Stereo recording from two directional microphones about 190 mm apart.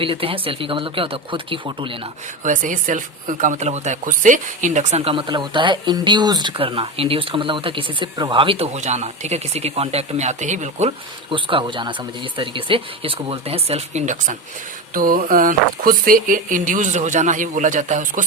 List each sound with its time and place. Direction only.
0.0 s speech: 30° right (ahead or behind)
2.4 s speech: 45° right (ahead or behind)